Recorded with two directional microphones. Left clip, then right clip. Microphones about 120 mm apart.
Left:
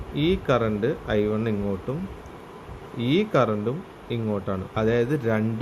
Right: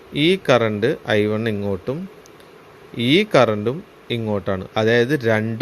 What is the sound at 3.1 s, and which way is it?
Speech, 90° right.